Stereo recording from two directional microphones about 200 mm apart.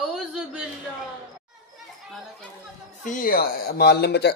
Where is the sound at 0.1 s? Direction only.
5° right (ahead or behind).